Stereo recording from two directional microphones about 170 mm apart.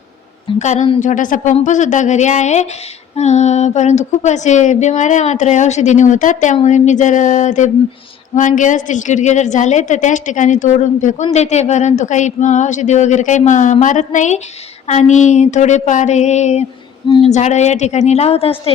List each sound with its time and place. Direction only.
0.6 s a woman's voice: 45° left (ahead or behind)